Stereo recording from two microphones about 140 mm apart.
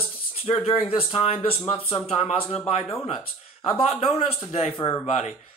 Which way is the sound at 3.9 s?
45° left (ahead or behind).